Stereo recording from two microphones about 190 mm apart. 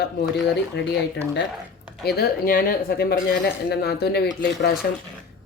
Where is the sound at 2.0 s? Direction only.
55° left (ahead or behind).